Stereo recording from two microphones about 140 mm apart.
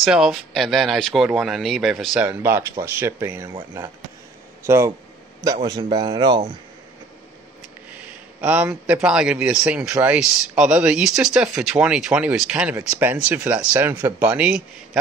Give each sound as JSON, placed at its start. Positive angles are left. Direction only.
{"t": 0.0, "sound": "speech", "side_deg": -5}
{"t": 4.6, "sound": "speech", "side_deg": -20}
{"t": 8.4, "sound": "speech", "side_deg": -10}